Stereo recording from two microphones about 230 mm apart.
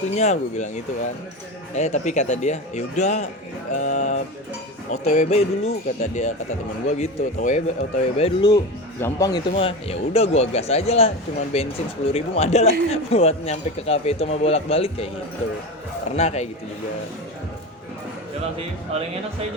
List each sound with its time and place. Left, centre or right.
0.2 s speech: left
1.7 s speech: left
12.1 s speech: left